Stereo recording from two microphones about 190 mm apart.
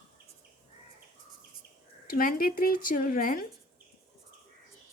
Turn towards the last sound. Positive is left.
turn(degrees=50)  # may be behind; listen again after turning